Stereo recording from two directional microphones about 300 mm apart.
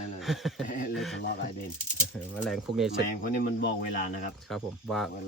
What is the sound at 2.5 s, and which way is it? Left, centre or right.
Speech, centre.